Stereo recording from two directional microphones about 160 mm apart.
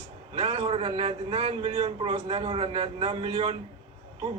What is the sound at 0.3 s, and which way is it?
A man's voice, 35° right (ahead or behind).